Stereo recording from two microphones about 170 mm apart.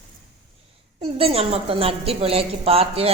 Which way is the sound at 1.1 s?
35° right (ahead or behind).